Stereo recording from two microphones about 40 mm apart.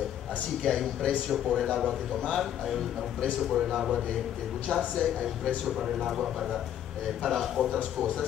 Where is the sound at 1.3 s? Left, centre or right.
Centre.